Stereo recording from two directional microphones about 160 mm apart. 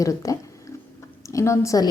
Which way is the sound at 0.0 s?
20° left (ahead or behind).